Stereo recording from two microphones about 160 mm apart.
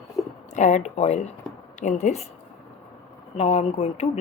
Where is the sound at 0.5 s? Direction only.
45° left (ahead or behind).